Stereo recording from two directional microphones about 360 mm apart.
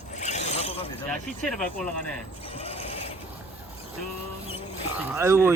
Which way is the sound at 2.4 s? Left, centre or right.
Centre.